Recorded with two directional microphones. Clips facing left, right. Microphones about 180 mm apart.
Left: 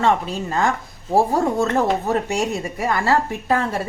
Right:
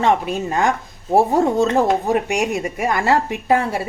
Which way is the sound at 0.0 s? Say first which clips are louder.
Right 2 dB; 15° right (ahead or behind).